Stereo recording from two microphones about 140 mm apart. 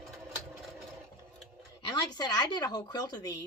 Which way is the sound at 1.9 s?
30° left (ahead or behind).